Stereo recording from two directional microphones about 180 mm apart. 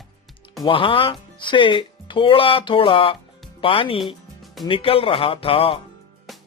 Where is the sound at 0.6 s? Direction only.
30° left (ahead or behind).